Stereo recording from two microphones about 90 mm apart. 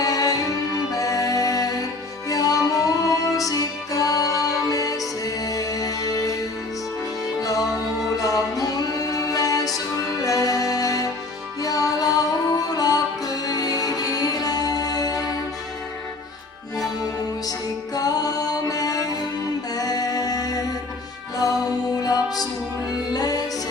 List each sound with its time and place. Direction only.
0.0 s music: 40° left (ahead or behind)
8.2 s music: 40° left (ahead or behind)
17.9 s music: 45° left (ahead or behind)